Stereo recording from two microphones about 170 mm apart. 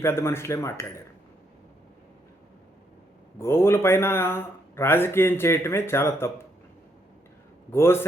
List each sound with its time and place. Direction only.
0.0 s speech: 15° left (ahead or behind)
3.3 s speech: 15° left (ahead or behind)
7.7 s speech: 15° left (ahead or behind)